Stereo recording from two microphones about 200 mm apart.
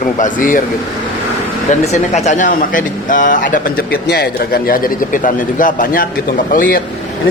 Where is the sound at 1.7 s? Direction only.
35° left (ahead or behind).